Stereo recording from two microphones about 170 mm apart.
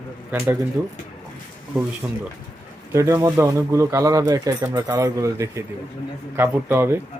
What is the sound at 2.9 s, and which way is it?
A man's voice, 15° right (ahead or behind).